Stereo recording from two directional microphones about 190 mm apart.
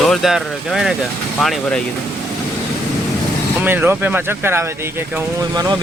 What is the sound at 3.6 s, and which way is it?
Speech, 10° right (ahead or behind).